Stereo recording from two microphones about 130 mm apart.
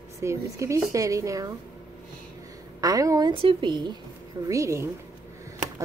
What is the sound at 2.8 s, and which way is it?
Speech, 25° right (ahead or behind).